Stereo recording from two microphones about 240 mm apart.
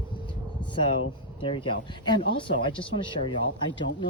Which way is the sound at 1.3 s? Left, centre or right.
Left.